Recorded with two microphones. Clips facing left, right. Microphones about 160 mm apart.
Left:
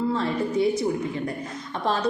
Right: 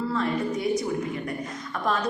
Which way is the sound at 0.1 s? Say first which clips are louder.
Left 1 dB; 30° left (ahead or behind).